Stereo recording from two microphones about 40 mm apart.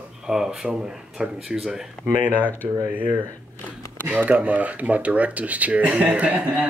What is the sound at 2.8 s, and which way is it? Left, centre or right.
Speech, right.